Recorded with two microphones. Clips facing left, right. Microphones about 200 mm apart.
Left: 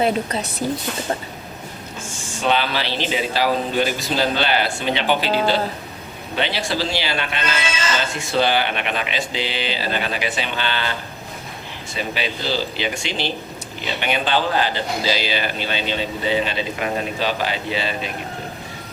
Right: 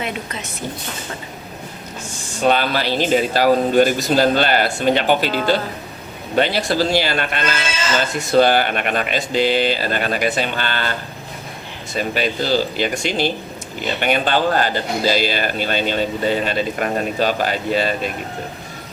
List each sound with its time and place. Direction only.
0.0 s a woman's voice: 35° left (ahead or behind)
2.4 s a man's voice: 45° right (ahead or behind)
6.3 s a man's voice: 45° right (ahead or behind)
11.9 s a man's voice: 45° right (ahead or behind)